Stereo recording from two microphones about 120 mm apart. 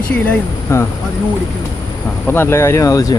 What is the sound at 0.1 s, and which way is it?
Speech, 20° left (ahead or behind).